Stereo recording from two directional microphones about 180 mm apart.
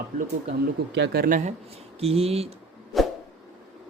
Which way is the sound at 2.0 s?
35° right (ahead or behind).